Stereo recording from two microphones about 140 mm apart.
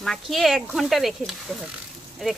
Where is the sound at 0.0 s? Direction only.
Centre (ahead or behind).